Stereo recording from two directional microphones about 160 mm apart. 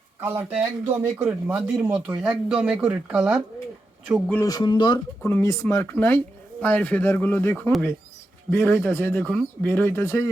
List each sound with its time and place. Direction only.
0.2 s speech: 15° right (ahead or behind)
4.3 s speech: 20° left (ahead or behind)
5.2 s speech: 15° left (ahead or behind)